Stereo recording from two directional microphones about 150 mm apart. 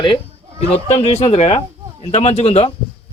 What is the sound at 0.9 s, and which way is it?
Speech, 45° left (ahead or behind).